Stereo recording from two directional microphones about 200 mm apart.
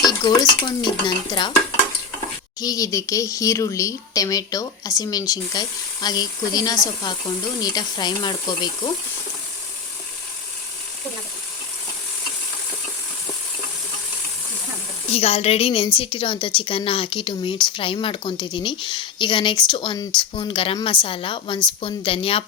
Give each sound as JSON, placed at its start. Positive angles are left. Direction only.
{"t": 0.0, "sound": "a woman's voice", "side_deg": 20}
{"t": 2.6, "sound": "a woman's voice", "side_deg": 20}
{"t": 15.1, "sound": "a woman's voice", "side_deg": 30}